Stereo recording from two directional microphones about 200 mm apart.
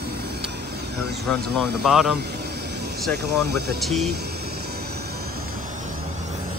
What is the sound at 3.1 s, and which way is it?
Speech, 55° right (ahead or behind).